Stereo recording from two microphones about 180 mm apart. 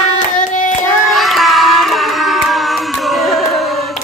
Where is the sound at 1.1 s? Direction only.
Centre (ahead or behind).